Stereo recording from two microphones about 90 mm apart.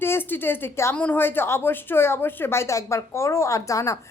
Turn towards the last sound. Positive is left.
turn(degrees=35)  # may be behind; listen again after turning